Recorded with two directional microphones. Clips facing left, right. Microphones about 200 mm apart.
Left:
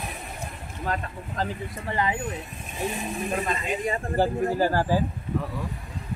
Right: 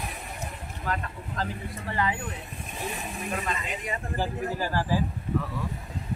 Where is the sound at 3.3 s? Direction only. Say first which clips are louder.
Left 4 dB; 30° left (ahead or behind).